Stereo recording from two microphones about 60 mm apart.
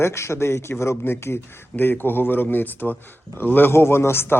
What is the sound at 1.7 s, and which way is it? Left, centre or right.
A man's voice, left.